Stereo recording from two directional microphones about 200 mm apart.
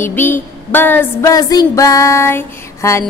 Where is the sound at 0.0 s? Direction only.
10° left (ahead or behind).